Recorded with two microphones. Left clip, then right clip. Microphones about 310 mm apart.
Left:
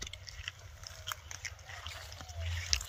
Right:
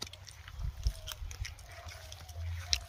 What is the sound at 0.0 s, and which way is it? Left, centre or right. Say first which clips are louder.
Boat: left 3 dB; centre.